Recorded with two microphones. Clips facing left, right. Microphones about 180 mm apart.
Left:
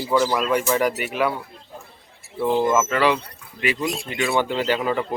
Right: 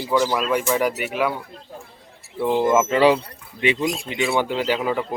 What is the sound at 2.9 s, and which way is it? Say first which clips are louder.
Speech: right 4 dB; 30° right (ahead or behind).